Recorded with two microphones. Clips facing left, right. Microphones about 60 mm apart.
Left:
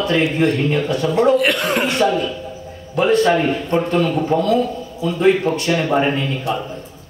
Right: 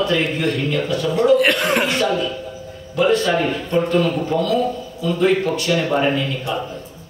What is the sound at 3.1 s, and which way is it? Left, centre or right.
A man's voice, left.